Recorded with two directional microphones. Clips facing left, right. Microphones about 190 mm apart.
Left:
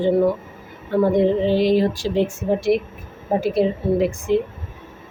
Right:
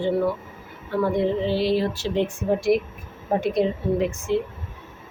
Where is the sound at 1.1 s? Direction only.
15° left (ahead or behind).